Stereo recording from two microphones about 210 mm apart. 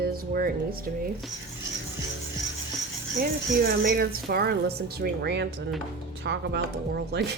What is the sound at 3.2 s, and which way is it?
A woman's voice, 45° right (ahead or behind).